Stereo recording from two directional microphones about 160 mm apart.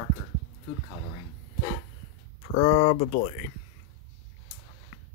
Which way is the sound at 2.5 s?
45° left (ahead or behind).